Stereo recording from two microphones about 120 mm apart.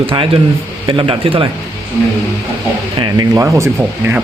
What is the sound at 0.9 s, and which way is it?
Speech, 45° right (ahead or behind).